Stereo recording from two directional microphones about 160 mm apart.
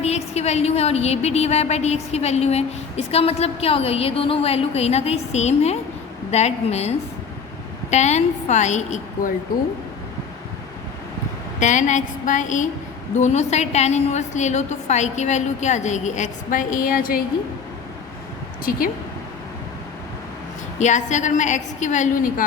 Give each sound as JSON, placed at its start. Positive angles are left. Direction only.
{"t": 0.0, "sound": "a woman's voice", "side_deg": 40}
{"t": 11.6, "sound": "a woman's voice", "side_deg": 50}
{"t": 20.7, "sound": "a woman's voice", "side_deg": 50}